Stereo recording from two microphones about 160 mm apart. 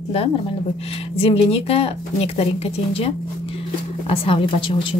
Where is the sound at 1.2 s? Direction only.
35° left (ahead or behind).